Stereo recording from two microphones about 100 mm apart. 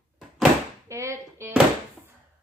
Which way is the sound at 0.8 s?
30° right (ahead or behind).